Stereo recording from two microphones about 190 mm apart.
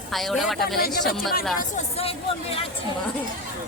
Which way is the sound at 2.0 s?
30° left (ahead or behind).